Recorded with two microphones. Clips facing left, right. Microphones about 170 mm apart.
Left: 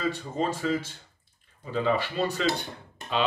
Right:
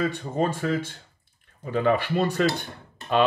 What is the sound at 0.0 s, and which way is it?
Speech, 60° right (ahead or behind).